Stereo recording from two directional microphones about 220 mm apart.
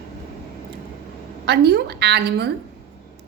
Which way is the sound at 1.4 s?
50° right (ahead or behind).